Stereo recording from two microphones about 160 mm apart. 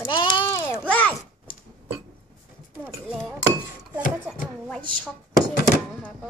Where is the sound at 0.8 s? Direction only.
10° left (ahead or behind).